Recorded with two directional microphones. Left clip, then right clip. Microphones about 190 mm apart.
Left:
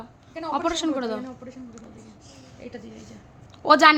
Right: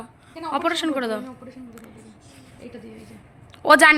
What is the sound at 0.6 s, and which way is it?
Speech, 5° left (ahead or behind).